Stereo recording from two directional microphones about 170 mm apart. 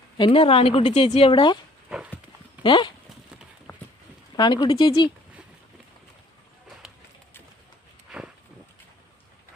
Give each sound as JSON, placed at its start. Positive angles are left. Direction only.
{"t": 0.2, "sound": "speech", "side_deg": 35}
{"t": 1.3, "sound": "speech", "side_deg": 30}
{"t": 1.9, "sound": "horse", "side_deg": -5}
{"t": 2.6, "sound": "speech", "side_deg": 30}
{"t": 3.7, "sound": "clip-clop", "side_deg": 15}
{"t": 4.4, "sound": "speech", "side_deg": 25}